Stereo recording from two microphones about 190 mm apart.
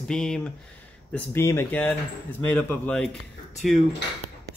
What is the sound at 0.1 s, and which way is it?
Speech, 5° left (ahead or behind).